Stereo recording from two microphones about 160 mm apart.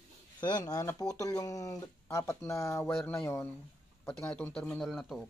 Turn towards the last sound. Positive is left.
turn(degrees=0)  # may be behind; listen again after turning